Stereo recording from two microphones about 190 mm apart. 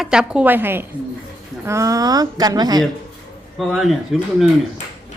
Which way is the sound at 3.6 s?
Centre (ahead or behind).